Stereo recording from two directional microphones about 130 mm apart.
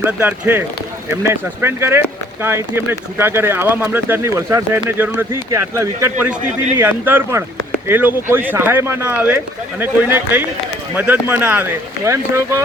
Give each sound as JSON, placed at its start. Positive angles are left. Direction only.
{"t": 0.0, "sound": "speech", "side_deg": -15}